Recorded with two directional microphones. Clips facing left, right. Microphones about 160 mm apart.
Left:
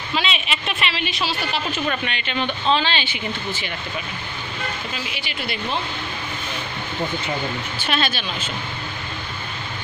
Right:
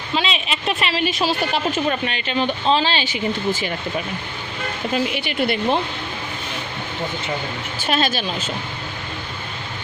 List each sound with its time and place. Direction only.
0.1 s speech: 30° right (ahead or behind); by 1.6 s 45° right (ahead or behind)
1.9 s speech: 35° right (ahead or behind)
4.9 s speech: 50° right (ahead or behind)
7.8 s speech: 40° right (ahead or behind)